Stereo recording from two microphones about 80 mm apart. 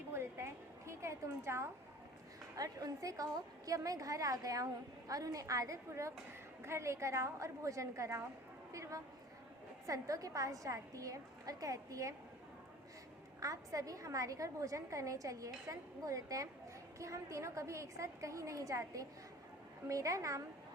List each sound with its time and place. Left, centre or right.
0.1 s a sound: right
2.6 s a woman's voice: right
13.4 s a woman's voice: right